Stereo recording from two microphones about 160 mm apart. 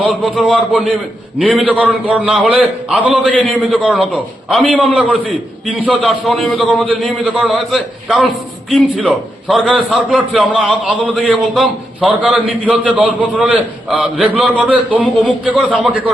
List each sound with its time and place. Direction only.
0.0 s a man's voice: 5° right (ahead or behind)
3.3 s a man's voice: 5° left (ahead or behind)
3.6 s a man's voice: 5° right (ahead or behind)